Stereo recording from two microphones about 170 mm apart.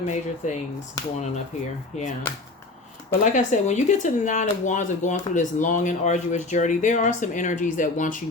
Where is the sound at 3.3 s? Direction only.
45° left (ahead or behind).